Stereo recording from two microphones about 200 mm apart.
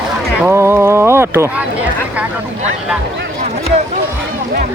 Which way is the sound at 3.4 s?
35° right (ahead or behind).